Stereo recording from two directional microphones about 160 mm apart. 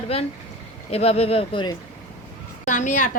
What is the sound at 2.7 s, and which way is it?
Speech, 50° left (ahead or behind).